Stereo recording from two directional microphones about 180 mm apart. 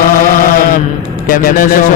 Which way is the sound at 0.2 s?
50° left (ahead or behind).